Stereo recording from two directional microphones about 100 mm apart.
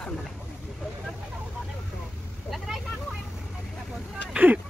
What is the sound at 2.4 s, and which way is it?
Vehicle, centre (ahead or behind).